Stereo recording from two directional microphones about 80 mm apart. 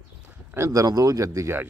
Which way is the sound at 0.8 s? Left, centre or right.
Right.